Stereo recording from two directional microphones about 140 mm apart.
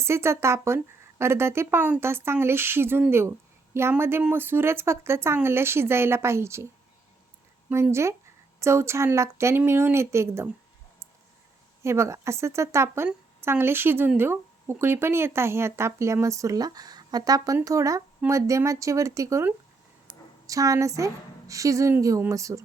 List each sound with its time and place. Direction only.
0.0 s speech: 20° right (ahead or behind)
7.7 s speech: 20° right (ahead or behind)
11.8 s speech: 20° right (ahead or behind)